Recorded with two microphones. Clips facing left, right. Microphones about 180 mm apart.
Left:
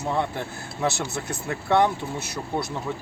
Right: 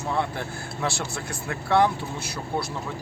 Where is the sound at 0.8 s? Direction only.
20° left (ahead or behind).